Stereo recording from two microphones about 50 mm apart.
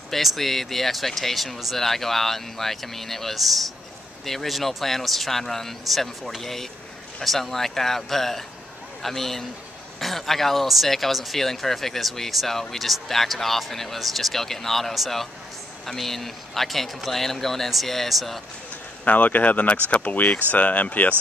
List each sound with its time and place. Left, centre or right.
0.1 s speech: centre
19.0 s speech: left